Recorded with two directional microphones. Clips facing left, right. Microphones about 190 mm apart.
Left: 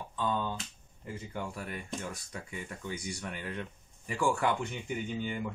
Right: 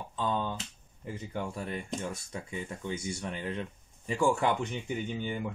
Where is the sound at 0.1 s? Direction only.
20° right (ahead or behind).